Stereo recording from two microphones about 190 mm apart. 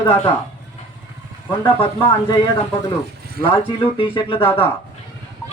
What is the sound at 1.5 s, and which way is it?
Speech, 25° left (ahead or behind).